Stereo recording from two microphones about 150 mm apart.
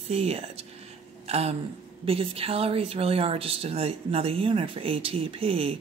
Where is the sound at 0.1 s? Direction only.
40° right (ahead or behind).